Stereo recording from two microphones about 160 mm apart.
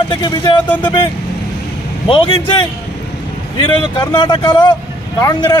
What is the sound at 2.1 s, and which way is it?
Speech, 35° left (ahead or behind).